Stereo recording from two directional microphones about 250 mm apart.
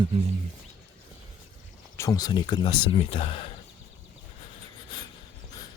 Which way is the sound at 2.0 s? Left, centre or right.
Centre.